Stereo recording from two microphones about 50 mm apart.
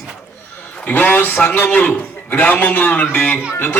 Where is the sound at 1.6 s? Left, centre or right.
Left.